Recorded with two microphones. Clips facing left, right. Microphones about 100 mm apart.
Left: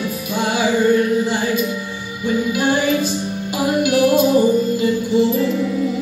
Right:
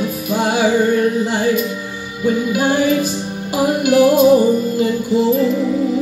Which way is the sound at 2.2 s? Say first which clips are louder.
Right 2 dB; 45° right (ahead or behind).